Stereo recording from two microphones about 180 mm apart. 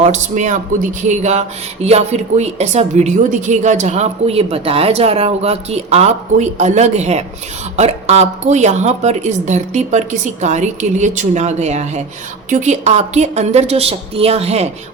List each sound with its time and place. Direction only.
0.0 s speech: 40° right (ahead or behind)